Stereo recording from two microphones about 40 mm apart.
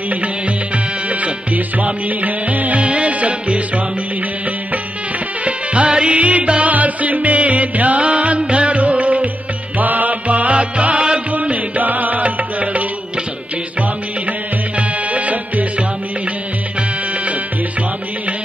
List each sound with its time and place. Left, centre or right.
1.0 s music: right
2.8 s music: right
5.4 s music: right
14.8 s music: right